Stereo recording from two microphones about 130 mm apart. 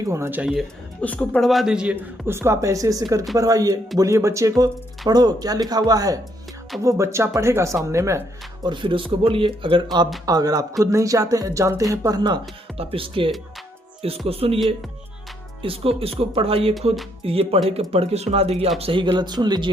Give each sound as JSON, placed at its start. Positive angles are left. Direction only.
{"t": 0.0, "sound": "speech", "side_deg": -20}
{"t": 1.0, "sound": "a woman's voice", "side_deg": 10}
{"t": 1.5, "sound": "a man's voice", "side_deg": -5}
{"t": 2.2, "sound": "speech", "side_deg": -20}
{"t": 8.6, "sound": "speech", "side_deg": -40}
{"t": 12.8, "sound": "speech", "side_deg": -45}
{"t": 15.6, "sound": "speech", "side_deg": -45}